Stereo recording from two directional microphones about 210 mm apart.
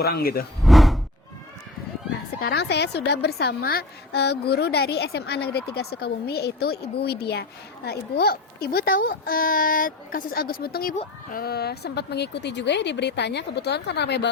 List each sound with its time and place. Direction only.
0.0 s a woman's voice: 45° left (ahead or behind)
0.6 s a sound: centre (ahead or behind)
2.4 s a woman's voice: 50° left (ahead or behind)